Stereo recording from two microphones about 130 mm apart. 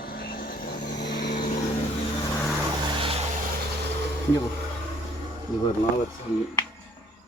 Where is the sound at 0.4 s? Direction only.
85° left.